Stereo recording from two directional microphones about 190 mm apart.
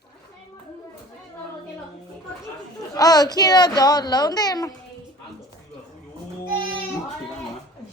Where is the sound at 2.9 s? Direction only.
20° left (ahead or behind).